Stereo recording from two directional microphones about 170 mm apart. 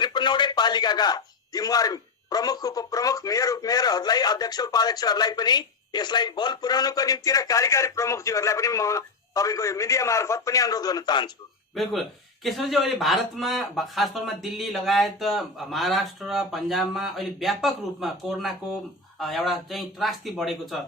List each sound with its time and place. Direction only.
0.0 s speech: 25° left (ahead or behind)
11.7 s a man's voice: centre (ahead or behind)